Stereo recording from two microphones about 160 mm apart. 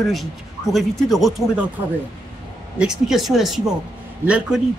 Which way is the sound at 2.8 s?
5° right (ahead or behind).